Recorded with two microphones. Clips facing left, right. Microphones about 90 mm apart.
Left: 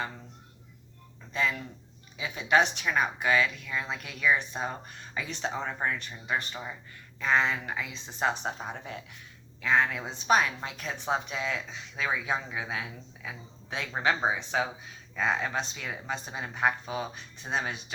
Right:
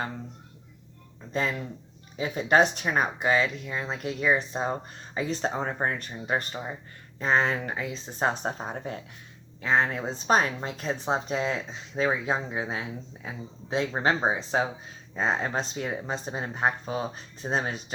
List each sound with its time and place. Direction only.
1.3 s a woman's voice: 40° right (ahead or behind)